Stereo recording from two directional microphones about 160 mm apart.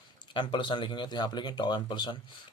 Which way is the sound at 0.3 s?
30° left (ahead or behind).